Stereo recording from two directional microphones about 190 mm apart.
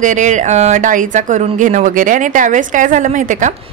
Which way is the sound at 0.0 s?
40° right (ahead or behind).